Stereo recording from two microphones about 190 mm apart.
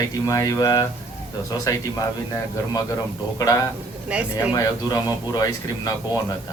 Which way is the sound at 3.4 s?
20° left (ahead or behind).